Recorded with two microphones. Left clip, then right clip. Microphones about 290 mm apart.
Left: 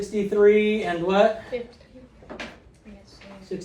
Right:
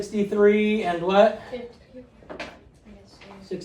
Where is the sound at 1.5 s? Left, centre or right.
Left.